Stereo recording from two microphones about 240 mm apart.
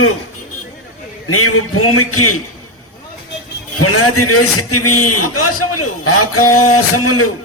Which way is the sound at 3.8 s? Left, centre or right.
Left.